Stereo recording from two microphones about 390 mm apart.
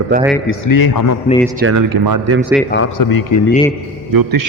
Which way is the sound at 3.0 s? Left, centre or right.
Left.